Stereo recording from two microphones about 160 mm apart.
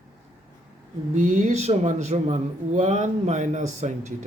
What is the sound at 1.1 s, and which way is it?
Speech, 50° right (ahead or behind).